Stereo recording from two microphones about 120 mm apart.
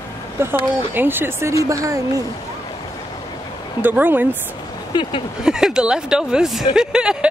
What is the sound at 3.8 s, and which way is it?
Speech, 15° right (ahead or behind).